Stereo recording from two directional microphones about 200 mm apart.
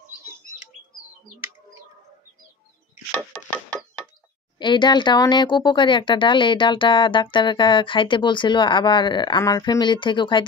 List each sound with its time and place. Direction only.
4.6 s speech: 20° left (ahead or behind)